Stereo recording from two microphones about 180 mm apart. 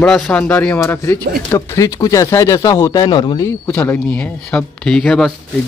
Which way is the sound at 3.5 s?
10° left (ahead or behind).